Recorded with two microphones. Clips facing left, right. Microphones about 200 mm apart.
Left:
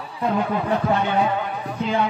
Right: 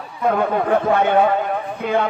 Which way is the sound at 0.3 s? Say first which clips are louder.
Right 5 dB; 55° right (ahead or behind).